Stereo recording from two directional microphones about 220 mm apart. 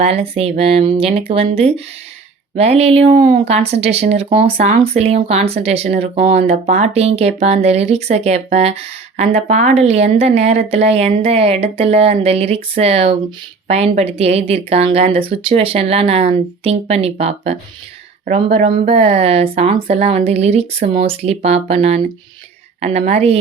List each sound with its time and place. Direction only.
0.0 s speech: 25° right (ahead or behind)